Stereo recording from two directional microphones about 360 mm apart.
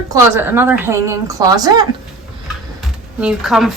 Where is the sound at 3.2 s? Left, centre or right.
Centre.